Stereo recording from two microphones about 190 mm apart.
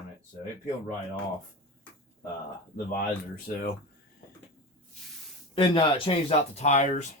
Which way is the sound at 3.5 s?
50° left (ahead or behind).